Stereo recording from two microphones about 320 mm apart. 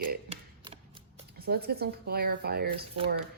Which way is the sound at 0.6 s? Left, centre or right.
Centre.